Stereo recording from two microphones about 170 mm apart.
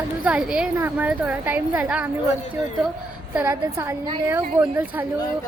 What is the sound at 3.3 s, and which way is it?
Speech, 10° right (ahead or behind).